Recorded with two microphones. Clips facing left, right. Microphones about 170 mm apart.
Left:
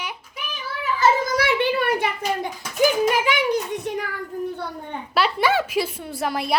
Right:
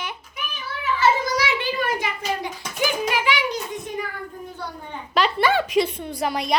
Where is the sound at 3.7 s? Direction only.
70° left (ahead or behind).